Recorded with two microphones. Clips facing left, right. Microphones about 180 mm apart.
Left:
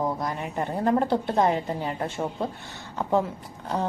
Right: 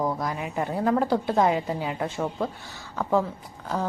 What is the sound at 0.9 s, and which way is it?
Speech, 20° left (ahead or behind).